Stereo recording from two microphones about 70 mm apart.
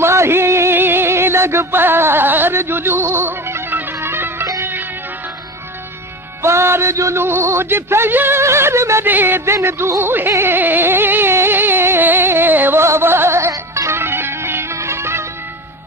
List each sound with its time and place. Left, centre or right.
0.0 s a sound: right
6.4 s a man's voice: right
9.0 s a man's voice: right
10.3 s carnatic music: right